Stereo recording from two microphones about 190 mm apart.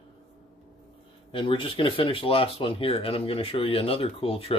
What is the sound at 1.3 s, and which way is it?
Speech, 25° left (ahead or behind).